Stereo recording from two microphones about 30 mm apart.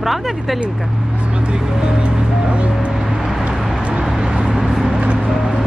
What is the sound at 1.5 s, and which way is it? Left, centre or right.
Speech, right.